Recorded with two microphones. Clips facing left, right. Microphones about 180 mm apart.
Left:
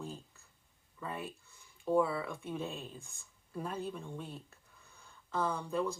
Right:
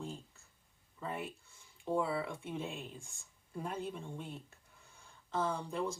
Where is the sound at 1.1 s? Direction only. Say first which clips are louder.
Right 1 dB; 20° right (ahead or behind).